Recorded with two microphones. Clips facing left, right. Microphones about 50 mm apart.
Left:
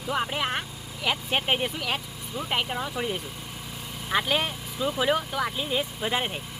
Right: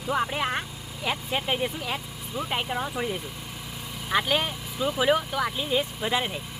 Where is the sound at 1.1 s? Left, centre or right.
Left.